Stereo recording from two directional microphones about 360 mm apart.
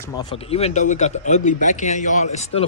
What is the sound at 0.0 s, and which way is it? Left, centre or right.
Speech, centre.